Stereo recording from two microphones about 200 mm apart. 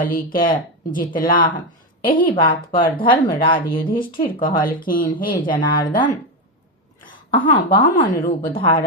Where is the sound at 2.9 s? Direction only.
25° left (ahead or behind).